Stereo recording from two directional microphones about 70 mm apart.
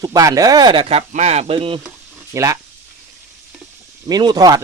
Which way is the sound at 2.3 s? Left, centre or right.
Right.